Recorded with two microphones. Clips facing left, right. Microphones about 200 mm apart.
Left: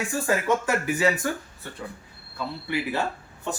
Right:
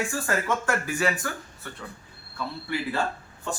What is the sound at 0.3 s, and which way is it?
Speech, 15° left (ahead or behind).